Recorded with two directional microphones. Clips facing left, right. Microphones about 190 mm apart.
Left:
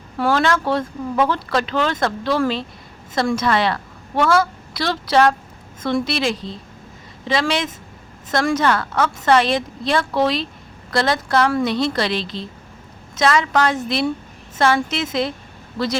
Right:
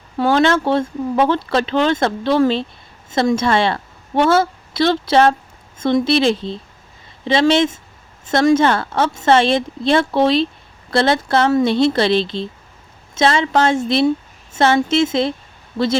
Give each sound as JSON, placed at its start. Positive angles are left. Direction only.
{"t": 0.2, "sound": "a woman's voice", "side_deg": -25}